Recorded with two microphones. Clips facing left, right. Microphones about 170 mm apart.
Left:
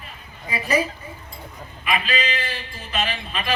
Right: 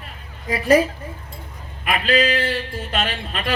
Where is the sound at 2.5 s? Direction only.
70° right (ahead or behind).